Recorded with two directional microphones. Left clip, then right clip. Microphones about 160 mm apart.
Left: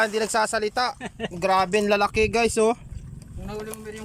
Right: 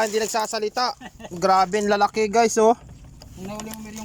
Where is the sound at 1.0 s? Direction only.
90° left.